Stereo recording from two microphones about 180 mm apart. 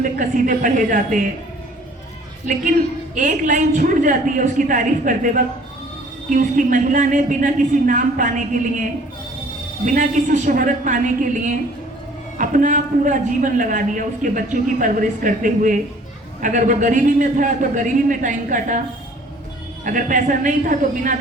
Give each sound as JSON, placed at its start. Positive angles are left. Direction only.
{"t": 0.0, "sound": "a man's voice", "side_deg": -45}
{"t": 3.2, "sound": "a man's voice", "side_deg": -45}
{"t": 19.8, "sound": "a man's voice", "side_deg": -45}